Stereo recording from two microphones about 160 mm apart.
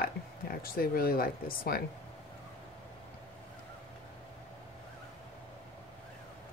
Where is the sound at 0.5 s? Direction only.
65° left (ahead or behind).